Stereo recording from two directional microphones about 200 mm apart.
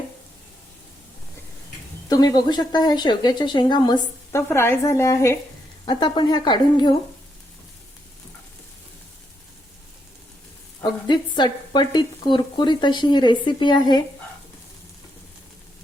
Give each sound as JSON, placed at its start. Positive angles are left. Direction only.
{"t": 2.0, "sound": "speech", "side_deg": 20}
{"t": 11.1, "sound": "speech", "side_deg": 20}